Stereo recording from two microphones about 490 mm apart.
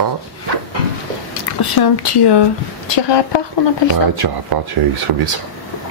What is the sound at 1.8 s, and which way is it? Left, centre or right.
A woman's voice, left.